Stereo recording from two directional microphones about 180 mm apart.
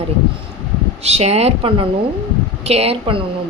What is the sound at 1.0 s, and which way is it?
A woman's voice, 35° right (ahead or behind).